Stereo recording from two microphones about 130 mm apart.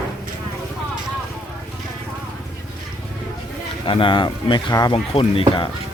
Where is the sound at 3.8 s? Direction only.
40° left (ahead or behind).